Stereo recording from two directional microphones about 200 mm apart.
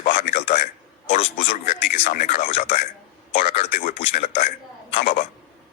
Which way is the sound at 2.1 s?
45° left (ahead or behind).